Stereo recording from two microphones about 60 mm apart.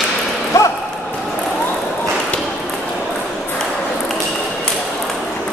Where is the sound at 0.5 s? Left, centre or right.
Left.